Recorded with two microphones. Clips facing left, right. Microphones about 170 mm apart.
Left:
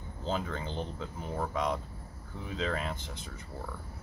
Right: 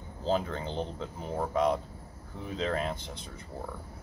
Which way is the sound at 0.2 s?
35° right (ahead or behind).